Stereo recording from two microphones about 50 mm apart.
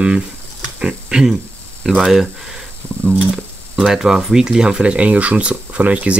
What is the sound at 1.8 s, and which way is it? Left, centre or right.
Speech, centre.